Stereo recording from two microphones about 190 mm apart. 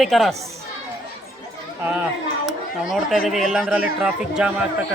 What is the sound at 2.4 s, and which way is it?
Speech, centre (ahead or behind).